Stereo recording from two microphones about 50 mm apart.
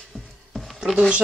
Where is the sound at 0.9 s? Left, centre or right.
Right.